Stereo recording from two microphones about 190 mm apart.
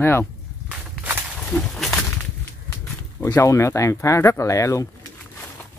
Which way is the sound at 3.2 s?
15° left (ahead or behind).